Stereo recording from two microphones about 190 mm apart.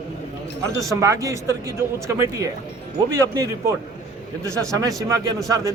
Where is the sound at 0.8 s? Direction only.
15° right (ahead or behind).